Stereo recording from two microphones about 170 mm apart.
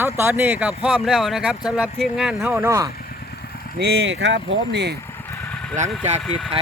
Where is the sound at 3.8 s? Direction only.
90° right.